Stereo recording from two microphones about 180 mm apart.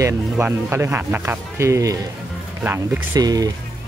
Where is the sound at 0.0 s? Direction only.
10° right (ahead or behind).